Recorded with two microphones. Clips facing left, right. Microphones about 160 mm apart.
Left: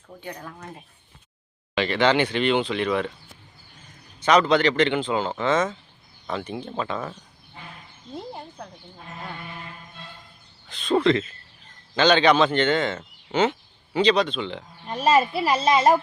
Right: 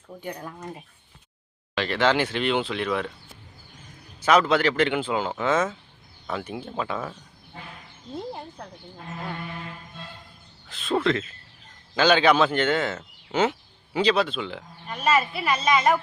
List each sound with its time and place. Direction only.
0.4 s speech: 10° right (ahead or behind)
4.2 s speech: 5° right (ahead or behind)
8.1 s speech: centre (ahead or behind)
10.7 s speech: centre (ahead or behind)
14.8 s speech: 30° left (ahead or behind)